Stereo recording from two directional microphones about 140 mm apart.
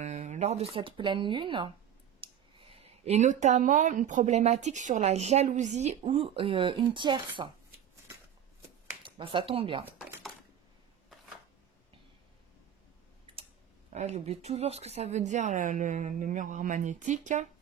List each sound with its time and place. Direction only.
0.0 s speech: 55° right (ahead or behind); by 1.7 s 35° right (ahead or behind)
2.2 s clicking: 40° right (ahead or behind)
2.6 s speech: 50° right (ahead or behind)
9.0 s speech: 40° right (ahead or behind)
13.9 s speech: 50° right (ahead or behind)